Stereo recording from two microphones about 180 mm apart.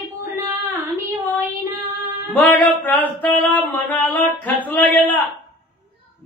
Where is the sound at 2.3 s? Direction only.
10° left (ahead or behind).